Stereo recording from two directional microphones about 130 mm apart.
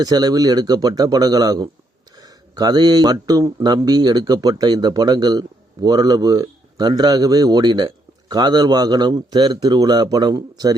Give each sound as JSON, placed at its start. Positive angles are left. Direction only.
{"t": 0.0, "sound": "speech", "side_deg": -30}